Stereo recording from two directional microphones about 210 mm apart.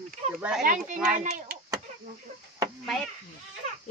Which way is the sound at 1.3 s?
50° right (ahead or behind).